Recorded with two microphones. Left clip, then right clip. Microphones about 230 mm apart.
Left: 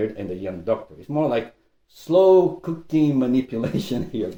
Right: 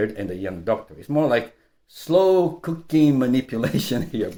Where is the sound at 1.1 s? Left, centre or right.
Right.